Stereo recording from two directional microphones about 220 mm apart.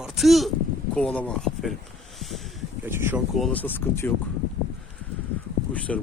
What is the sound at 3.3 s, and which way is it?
Speech, 5° left (ahead or behind).